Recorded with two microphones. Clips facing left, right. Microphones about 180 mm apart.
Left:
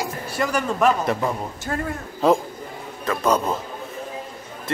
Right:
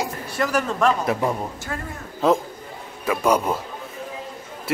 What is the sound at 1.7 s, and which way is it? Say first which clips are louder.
Speech: left 7 dB; 40° left (ahead or behind).